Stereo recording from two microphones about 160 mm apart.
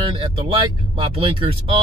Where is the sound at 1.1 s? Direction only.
35° right (ahead or behind).